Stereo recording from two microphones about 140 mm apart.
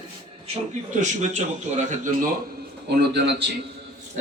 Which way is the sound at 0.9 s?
60° right (ahead or behind).